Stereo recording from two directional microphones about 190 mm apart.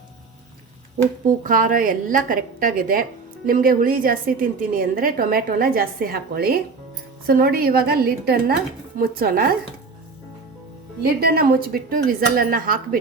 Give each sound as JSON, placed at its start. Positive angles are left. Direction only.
{"t": 1.5, "sound": "a woman's voice", "side_deg": -45}
{"t": 11.0, "sound": "a woman's voice", "side_deg": -55}